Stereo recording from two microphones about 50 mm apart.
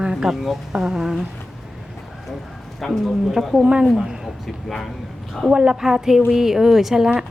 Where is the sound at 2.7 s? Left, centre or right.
Centre.